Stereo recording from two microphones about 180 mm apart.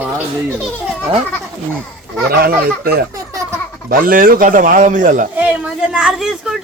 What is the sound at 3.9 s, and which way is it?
Speech, 50° right (ahead or behind).